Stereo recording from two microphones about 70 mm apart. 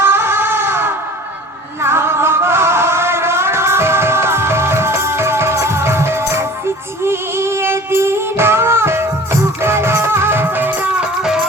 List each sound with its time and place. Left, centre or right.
0.0 s music: right